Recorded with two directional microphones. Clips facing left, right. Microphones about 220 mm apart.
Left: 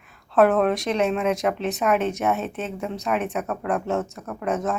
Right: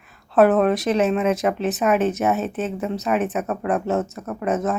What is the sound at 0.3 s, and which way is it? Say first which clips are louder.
Speech: right 2 dB; 5° right (ahead or behind).